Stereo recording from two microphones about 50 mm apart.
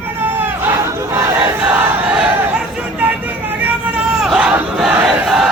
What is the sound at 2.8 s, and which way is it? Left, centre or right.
Vehicle, right.